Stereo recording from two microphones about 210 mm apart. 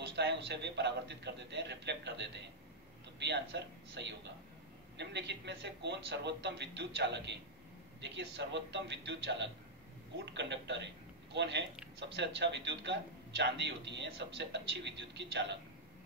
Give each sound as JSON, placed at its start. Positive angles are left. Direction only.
{"t": 0.0, "sound": "a man's voice", "side_deg": -50}